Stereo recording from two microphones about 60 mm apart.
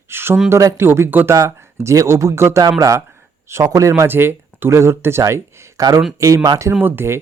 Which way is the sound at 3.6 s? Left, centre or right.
Right.